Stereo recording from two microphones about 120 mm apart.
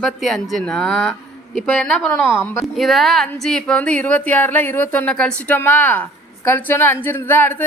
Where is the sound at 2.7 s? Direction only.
Centre (ahead or behind); by 7.6 s 15° left (ahead or behind).